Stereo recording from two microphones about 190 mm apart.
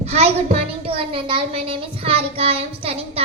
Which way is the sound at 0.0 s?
35° right (ahead or behind).